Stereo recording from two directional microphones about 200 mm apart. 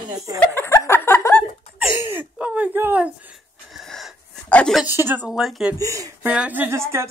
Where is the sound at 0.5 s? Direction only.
15° left (ahead or behind).